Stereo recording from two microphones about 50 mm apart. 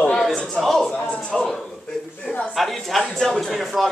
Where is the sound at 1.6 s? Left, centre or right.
Centre.